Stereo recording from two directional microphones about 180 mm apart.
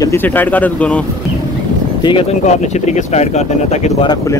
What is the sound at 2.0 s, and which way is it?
Speech, 25° left (ahead or behind).